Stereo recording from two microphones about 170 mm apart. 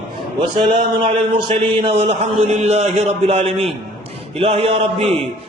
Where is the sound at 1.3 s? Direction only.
30° right (ahead or behind).